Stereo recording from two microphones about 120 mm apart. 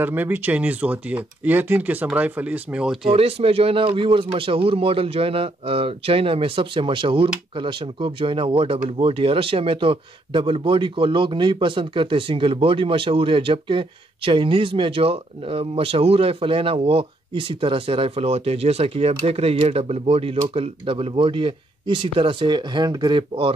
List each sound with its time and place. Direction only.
0.0 s speech: 15° right (ahead or behind)
3.1 s speech: 55° right (ahead or behind)